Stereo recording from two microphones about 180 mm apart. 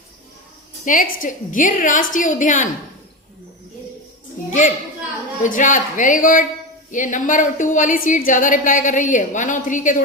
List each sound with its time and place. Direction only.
0.9 s a woman's voice: 50° left (ahead or behind)
5.4 s a woman's voice: 45° left (ahead or behind)